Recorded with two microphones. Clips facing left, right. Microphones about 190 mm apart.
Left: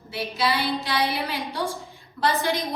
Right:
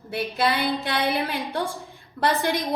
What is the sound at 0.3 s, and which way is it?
A woman's voice, 55° right (ahead or behind).